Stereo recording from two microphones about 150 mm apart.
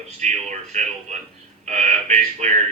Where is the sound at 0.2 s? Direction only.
50° right (ahead or behind).